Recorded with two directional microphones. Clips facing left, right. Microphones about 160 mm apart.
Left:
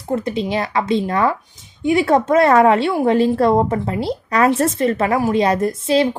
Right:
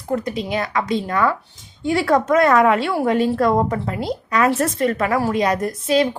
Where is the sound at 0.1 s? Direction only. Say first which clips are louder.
Left 2 dB; 25° left (ahead or behind).